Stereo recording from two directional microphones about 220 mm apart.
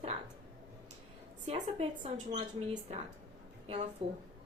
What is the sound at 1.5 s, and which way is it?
Speech, 30° right (ahead or behind).